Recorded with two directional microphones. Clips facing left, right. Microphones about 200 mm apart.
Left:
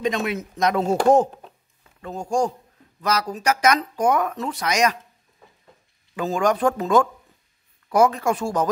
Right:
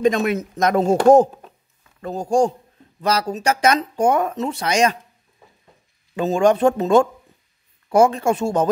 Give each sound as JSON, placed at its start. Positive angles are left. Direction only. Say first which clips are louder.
{"t": 0.0, "sound": "speech", "louder": "right 6 dB", "side_deg": -45}
{"t": 2.0, "sound": "speech", "louder": "right 5 dB", "side_deg": -35}
{"t": 6.1, "sound": "speech", "louder": "right 5 dB", "side_deg": -25}